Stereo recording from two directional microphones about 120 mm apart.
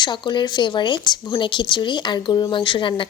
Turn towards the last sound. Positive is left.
turn(degrees=45)  # may be behind; listen again after turning